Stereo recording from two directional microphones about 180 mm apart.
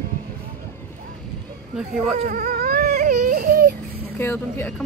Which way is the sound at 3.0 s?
45° right (ahead or behind).